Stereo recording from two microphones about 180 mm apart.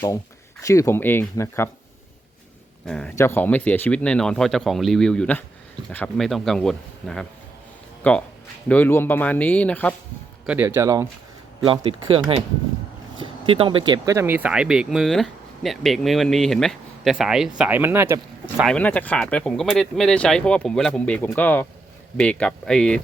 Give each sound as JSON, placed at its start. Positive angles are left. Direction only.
{"t": 0.6, "sound": "speech", "side_deg": 15}
{"t": 2.8, "sound": "speech", "side_deg": 5}
{"t": 10.4, "sound": "speech", "side_deg": -5}
{"t": 10.8, "sound": "speech", "side_deg": -20}
{"t": 11.6, "sound": "speech", "side_deg": -30}
{"t": 18.6, "sound": "speech", "side_deg": 5}